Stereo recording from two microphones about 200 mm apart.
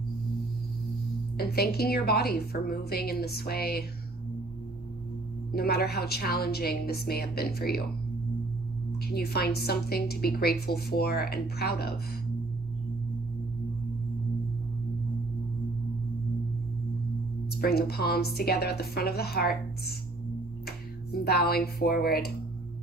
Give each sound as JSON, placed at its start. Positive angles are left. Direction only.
{"t": 1.4, "sound": "a woman's voice", "side_deg": 50}
{"t": 5.5, "sound": "a woman's voice", "side_deg": 50}
{"t": 9.0, "sound": "a woman's voice", "side_deg": 50}
{"t": 17.6, "sound": "a woman's voice", "side_deg": 50}